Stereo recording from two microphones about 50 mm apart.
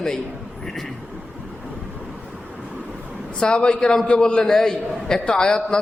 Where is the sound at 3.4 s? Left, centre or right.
Centre.